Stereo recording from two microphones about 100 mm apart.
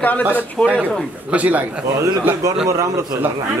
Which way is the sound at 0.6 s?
10° right (ahead or behind).